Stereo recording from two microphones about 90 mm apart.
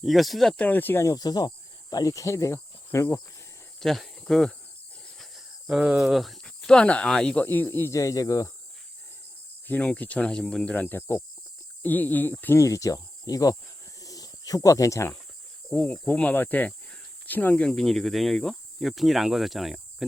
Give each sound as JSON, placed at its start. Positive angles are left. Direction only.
{"t": 0.0, "sound": "speech", "side_deg": 0}
{"t": 0.5, "sound": "speech", "side_deg": 20}
{"t": 1.0, "sound": "speech", "side_deg": 45}
{"t": 3.8, "sound": "speech", "side_deg": 0}
{"t": 5.0, "sound": "wheeze", "side_deg": 0}
{"t": 5.6, "sound": "speech", "side_deg": -10}
{"t": 6.4, "sound": "speech", "side_deg": 10}
{"t": 7.4, "sound": "speech", "side_deg": 20}
{"t": 7.9, "sound": "speech", "side_deg": 40}
{"t": 9.6, "sound": "speech", "side_deg": 15}
{"t": 12.5, "sound": "speech", "side_deg": 35}
{"t": 14.0, "sound": "a sound", "side_deg": 40}
{"t": 15.7, "sound": "speech", "side_deg": 20}